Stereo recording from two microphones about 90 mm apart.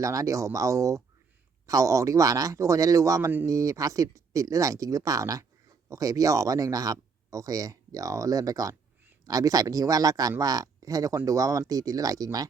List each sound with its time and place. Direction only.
0.0 s speech: 35° right (ahead or behind)